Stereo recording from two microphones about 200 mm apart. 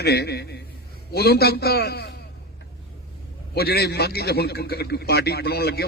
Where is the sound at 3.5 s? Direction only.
50° left (ahead or behind).